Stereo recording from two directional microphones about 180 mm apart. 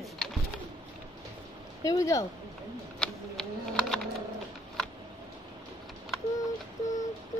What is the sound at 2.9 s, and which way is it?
Typing, 5° left (ahead or behind).